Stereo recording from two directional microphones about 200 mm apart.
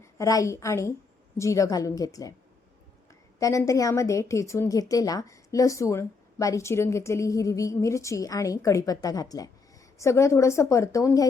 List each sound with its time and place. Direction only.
0.0 s a woman's voice: 15° left (ahead or behind)
3.4 s a woman's voice: 15° left (ahead or behind)